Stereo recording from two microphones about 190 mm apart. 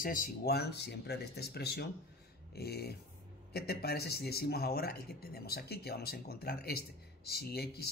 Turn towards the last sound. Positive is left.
turn(degrees=55)  # may be behind; listen again after turning